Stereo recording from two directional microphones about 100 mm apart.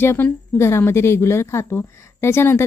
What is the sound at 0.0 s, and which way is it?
A woman's voice, 25° left (ahead or behind).